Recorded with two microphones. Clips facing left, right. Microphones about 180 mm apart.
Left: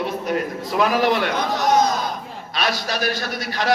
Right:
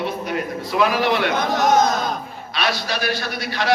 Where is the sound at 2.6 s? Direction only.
45° left (ahead or behind).